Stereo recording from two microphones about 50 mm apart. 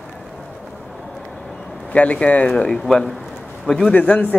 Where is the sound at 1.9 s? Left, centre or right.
Left.